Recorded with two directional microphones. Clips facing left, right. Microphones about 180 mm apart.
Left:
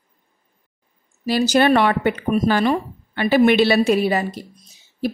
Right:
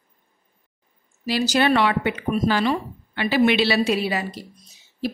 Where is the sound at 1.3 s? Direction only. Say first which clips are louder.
Left 4 dB; 45° left (ahead or behind).